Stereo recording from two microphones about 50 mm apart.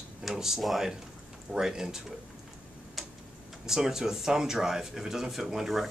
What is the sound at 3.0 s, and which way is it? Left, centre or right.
Tick-tock, centre.